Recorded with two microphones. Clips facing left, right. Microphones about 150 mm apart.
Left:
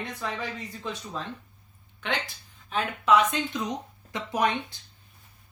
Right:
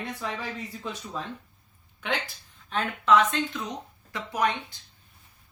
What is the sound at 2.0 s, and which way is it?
Speech, 5° right (ahead or behind).